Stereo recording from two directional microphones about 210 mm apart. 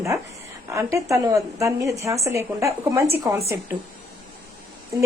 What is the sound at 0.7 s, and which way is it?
A woman's voice, 15° right (ahead or behind).